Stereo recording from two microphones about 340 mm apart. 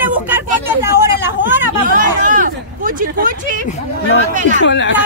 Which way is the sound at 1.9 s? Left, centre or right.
Right.